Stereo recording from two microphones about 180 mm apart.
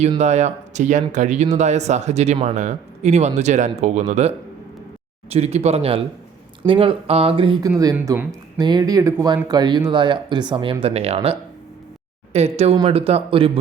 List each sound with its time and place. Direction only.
0.2 s speech: 40° right (ahead or behind)
7.9 s speech: 10° right (ahead or behind); by 13.6 s 30° right (ahead or behind)